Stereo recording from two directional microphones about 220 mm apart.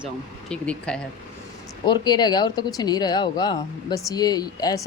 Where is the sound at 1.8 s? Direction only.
20° left (ahead or behind).